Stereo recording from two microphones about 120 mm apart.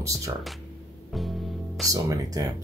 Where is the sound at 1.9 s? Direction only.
30° right (ahead or behind).